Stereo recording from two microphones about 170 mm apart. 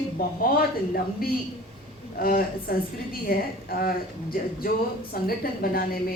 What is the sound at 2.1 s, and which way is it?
A woman's voice, 60° left (ahead or behind).